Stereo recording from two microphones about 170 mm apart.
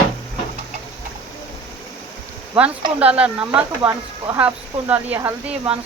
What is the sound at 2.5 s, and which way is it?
Speech, 10° right (ahead or behind).